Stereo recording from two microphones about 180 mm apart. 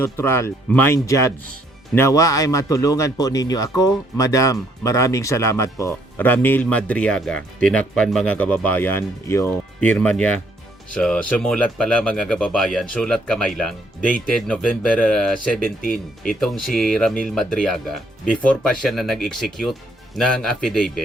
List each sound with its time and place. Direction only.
0.0 s a man's voice: 15° left (ahead or behind)
15.8 s speech: 50° left (ahead or behind)
16.3 s speech: centre (ahead or behind)